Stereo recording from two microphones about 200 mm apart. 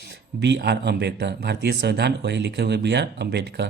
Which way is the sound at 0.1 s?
60° right (ahead or behind).